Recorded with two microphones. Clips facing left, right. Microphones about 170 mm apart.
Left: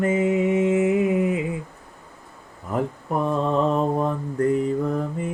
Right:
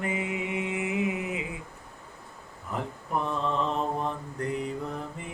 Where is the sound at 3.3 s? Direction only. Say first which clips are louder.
Left 10 dB; 45° left (ahead or behind).